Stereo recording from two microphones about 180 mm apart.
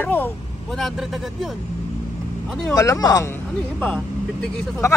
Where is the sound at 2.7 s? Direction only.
20° left (ahead or behind).